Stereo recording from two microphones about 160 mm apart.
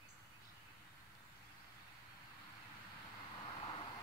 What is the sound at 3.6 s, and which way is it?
Vehicle, 30° left (ahead or behind).